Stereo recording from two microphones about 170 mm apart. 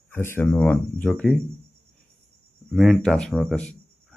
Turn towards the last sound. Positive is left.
turn(degrees=5)  # may be behind; listen again after turning